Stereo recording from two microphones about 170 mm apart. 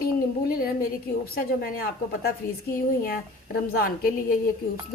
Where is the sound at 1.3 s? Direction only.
60° left (ahead or behind).